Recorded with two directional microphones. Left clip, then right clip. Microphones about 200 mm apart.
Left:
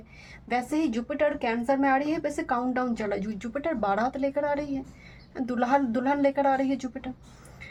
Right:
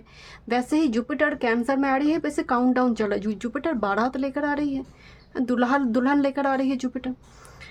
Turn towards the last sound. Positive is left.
turn(degrees=-35)  # may be behind; listen again after turning